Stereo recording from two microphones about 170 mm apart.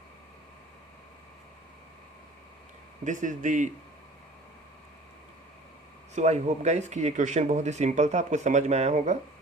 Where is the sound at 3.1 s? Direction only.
50° right (ahead or behind).